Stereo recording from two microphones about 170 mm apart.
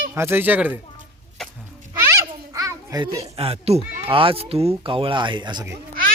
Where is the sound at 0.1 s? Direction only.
15° right (ahead or behind).